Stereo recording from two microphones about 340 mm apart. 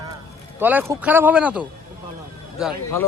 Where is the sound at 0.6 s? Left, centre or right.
Centre.